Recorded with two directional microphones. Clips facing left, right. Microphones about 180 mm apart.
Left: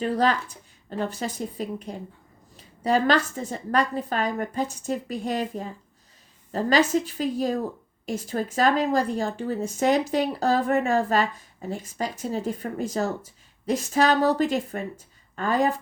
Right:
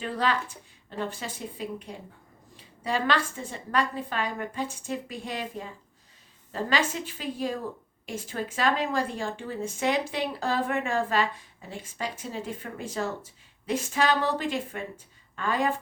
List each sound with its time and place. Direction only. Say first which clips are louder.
0.0 s speech: left 5 dB; 40° left (ahead or behind)